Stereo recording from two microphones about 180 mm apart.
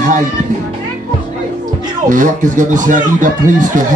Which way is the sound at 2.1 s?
45° right (ahead or behind).